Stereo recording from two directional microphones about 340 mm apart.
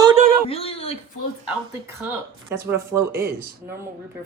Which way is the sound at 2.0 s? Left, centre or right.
Centre.